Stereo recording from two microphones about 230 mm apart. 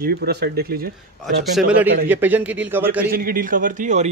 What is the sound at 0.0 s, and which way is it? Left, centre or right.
Speech, right.